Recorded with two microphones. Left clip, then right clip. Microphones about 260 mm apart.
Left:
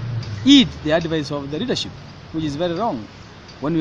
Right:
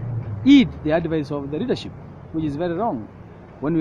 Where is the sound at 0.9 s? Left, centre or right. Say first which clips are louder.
Left 2 dB; left.